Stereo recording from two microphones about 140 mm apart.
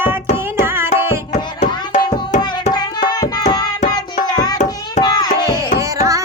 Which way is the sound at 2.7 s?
30° left (ahead or behind).